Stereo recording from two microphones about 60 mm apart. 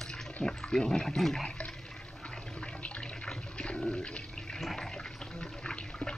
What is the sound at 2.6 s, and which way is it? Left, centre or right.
Toilet flush, centre.